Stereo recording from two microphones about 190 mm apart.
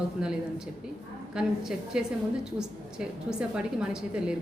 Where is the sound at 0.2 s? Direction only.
5° right (ahead or behind).